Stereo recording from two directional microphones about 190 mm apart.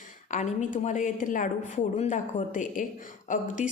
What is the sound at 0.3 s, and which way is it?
A woman's voice, 40° left (ahead or behind).